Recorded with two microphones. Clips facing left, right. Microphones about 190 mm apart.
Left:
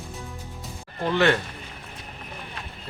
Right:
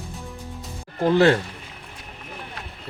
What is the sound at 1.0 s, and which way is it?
Speech, 35° right (ahead or behind).